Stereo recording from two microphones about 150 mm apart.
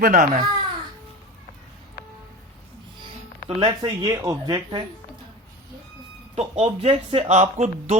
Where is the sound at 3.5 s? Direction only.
35° right (ahead or behind).